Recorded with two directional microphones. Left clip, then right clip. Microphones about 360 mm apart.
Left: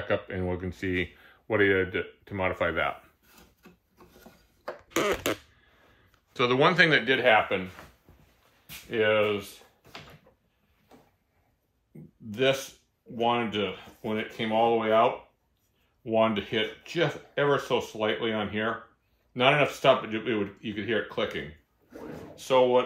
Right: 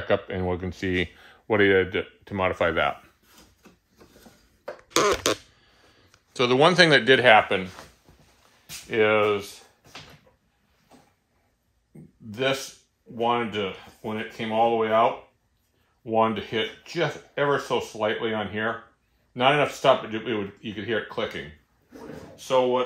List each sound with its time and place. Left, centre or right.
0.1 s speech: centre
5.6 s speech: centre; by 7.6 s right
8.9 s speech: centre
12.3 s speech: centre
22.3 s speech: centre